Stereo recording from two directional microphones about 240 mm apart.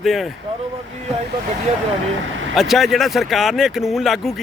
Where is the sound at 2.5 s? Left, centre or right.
Centre.